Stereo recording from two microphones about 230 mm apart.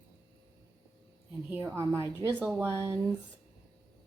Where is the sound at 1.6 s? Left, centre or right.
Centre.